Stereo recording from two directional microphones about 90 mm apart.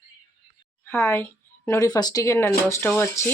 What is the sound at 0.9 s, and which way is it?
A woman's voice, 30° left (ahead or behind).